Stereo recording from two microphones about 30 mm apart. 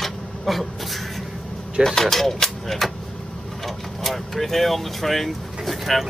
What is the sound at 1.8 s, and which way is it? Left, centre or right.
Speech, centre.